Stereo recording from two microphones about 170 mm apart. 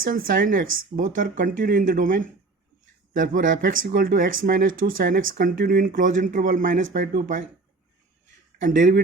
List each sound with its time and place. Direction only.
0.0 s speech: 55° right (ahead or behind)
6.9 s speech: 75° right (ahead or behind)
8.6 s speech: 50° right (ahead or behind)